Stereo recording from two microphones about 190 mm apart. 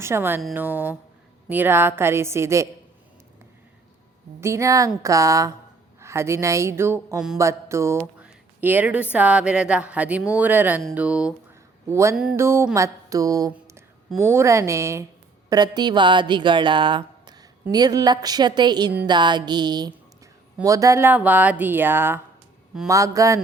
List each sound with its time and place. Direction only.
0.0 s speech: 10° right (ahead or behind)
4.4 s speech: 15° right (ahead or behind)
12.1 s music: 5° right (ahead or behind)
14.2 s speech: 15° right (ahead or behind)